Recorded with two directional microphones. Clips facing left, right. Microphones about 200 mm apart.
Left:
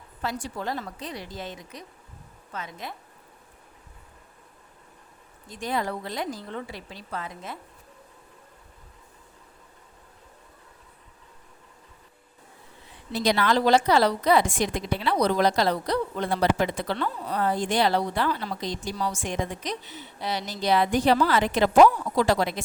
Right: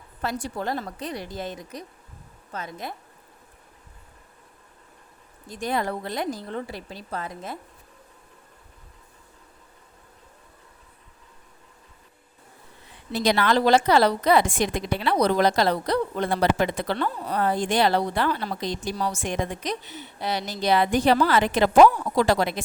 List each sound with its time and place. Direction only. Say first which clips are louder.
0.5 s speech: right 3 dB; 45° right (ahead or behind)
5.5 s speech: right 3 dB; 40° right (ahead or behind)
5.7 s a woman's voice: right 2 dB; 55° right (ahead or behind)
6.5 s speech: right 3 dB; 40° right (ahead or behind)
13.1 s a woman's voice: right 2 dB; 65° right (ahead or behind)
18.9 s speech: right 2 dB; 45° right (ahead or behind)
19.2 s a woman's voice: right 2 dB; 60° right (ahead or behind)